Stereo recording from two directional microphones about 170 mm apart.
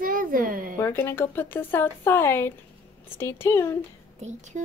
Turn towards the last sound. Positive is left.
turn(degrees=15)  # may be behind; listen again after turning